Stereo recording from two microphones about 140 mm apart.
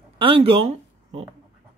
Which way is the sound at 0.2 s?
40° right (ahead or behind).